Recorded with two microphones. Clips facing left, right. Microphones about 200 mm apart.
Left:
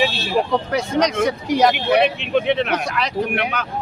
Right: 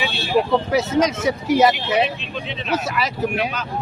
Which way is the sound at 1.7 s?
60° left (ahead or behind).